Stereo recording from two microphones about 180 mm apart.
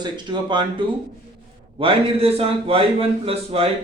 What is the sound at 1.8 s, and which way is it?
A man's voice, 35° right (ahead or behind).